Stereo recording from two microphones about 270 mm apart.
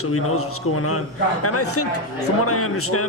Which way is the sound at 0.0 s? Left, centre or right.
Left.